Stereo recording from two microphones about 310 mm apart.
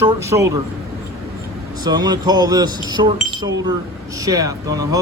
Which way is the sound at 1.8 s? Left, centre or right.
Centre.